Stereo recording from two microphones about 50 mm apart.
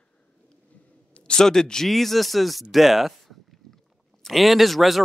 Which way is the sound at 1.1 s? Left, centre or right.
Centre.